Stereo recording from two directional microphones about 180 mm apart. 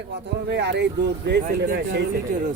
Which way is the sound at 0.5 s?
70° right (ahead or behind).